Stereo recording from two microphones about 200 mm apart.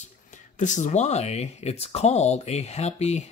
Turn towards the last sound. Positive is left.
turn(degrees=35)  # may be behind; listen again after turning